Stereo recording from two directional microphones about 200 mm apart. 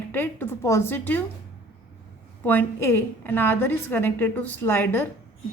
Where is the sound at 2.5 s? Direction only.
10° left (ahead or behind).